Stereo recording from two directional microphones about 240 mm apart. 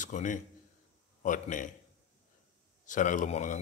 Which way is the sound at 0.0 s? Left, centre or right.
Left.